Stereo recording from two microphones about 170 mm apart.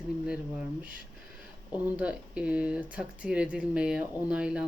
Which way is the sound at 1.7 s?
5° right (ahead or behind).